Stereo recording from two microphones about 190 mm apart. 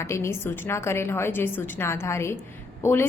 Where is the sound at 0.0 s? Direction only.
15° left (ahead or behind).